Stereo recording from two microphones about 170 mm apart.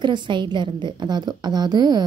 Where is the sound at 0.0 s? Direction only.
25° right (ahead or behind).